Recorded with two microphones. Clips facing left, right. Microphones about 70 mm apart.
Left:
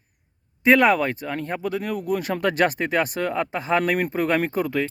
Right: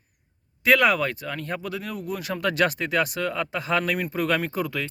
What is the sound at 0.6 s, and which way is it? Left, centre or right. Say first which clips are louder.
Speech: left 3 dB; left.